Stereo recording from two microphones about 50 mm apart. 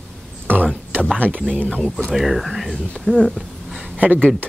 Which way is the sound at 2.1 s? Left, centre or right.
Centre.